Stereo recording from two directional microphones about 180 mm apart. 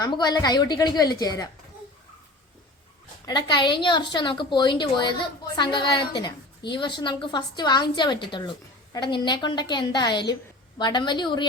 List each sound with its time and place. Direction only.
0.0 s a woman's voice: 25° left (ahead or behind)
3.2 s a woman's voice: 25° left (ahead or behind)